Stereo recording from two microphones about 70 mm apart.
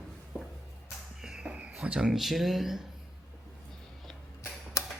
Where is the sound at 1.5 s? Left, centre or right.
Centre.